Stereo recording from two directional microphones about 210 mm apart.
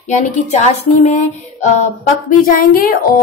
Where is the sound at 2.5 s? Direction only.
45° left (ahead or behind).